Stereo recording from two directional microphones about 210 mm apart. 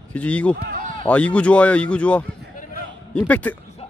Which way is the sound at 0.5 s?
40° right (ahead or behind).